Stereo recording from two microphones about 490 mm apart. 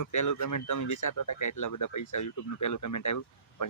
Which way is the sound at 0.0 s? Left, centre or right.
Left.